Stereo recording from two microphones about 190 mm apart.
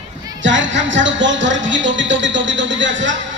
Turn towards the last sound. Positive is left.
turn(degrees=-75)  # may be behind; listen again after turning